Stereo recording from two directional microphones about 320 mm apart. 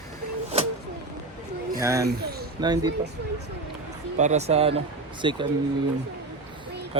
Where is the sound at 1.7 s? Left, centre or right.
Centre.